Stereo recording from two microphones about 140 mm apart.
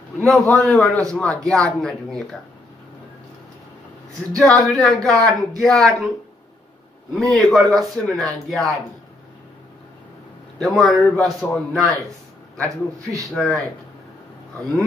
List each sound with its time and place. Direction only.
0.2 s a man's voice: centre (ahead or behind)
4.4 s a man's voice: centre (ahead or behind)
7.2 s a man's voice: centre (ahead or behind)
10.6 s a man's voice: centre (ahead or behind)
12.6 s a man's voice: 20° right (ahead or behind)
13.3 s a man's voice: centre (ahead or behind)